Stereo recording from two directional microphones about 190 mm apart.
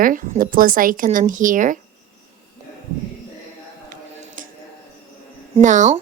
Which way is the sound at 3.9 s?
45° right (ahead or behind).